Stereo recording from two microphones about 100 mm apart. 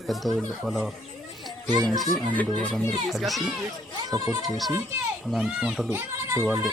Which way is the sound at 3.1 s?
Centre (ahead or behind).